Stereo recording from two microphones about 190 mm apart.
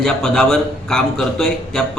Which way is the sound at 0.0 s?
5° left (ahead or behind).